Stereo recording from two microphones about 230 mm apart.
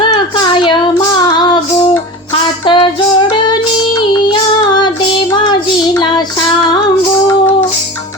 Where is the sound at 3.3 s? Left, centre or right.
Centre.